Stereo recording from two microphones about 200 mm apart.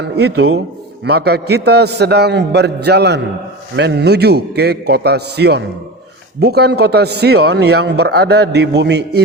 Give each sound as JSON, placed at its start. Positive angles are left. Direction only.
{"t": 0.0, "sound": "a man's voice", "side_deg": -55}